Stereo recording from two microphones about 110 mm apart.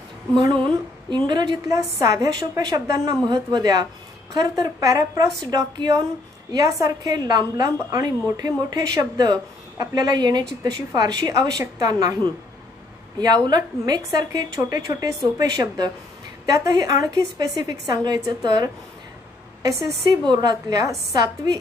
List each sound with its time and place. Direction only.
0.3 s a woman's voice: 40° right (ahead or behind)
20.1 s a woman's voice: 35° right (ahead or behind)